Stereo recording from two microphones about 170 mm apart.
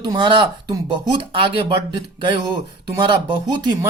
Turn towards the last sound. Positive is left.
turn(degrees=-25)  # may be behind; listen again after turning